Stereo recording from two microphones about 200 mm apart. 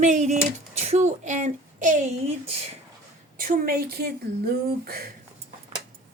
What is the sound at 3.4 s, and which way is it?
Speech, 45° right (ahead or behind).